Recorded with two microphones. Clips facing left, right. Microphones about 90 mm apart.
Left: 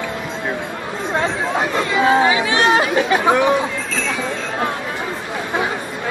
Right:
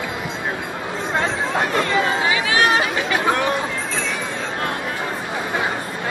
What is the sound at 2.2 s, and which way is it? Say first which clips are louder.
Chatter: left 3 dB; 25° left (ahead or behind).